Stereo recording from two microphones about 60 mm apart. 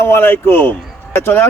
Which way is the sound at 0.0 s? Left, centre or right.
Left.